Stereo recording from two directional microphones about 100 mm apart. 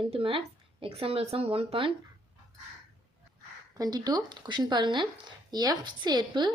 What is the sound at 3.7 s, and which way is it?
A woman's voice, 40° right (ahead or behind).